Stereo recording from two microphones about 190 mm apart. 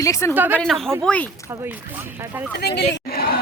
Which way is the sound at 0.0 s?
15° left (ahead or behind).